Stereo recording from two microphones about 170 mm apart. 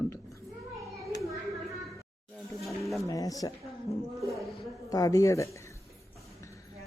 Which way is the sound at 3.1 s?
20° left (ahead or behind).